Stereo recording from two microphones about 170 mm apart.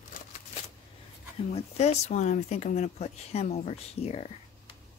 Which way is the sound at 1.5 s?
40° left (ahead or behind).